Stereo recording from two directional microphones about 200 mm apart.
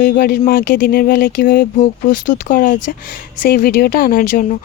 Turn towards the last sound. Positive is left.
turn(degrees=45)  # may be behind; listen again after turning